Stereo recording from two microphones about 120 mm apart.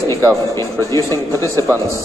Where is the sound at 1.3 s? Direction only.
25° right (ahead or behind).